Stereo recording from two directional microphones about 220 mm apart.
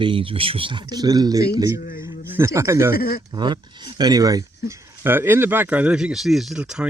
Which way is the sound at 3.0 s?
45° left (ahead or behind).